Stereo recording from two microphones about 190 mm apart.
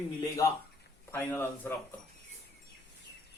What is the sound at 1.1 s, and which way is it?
Speech, 10° left (ahead or behind).